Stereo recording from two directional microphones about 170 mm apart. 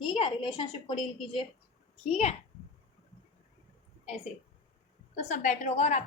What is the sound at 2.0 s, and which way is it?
Speech, 40° left (ahead or behind).